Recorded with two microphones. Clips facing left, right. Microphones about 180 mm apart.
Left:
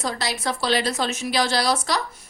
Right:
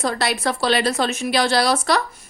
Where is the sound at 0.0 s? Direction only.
60° right (ahead or behind).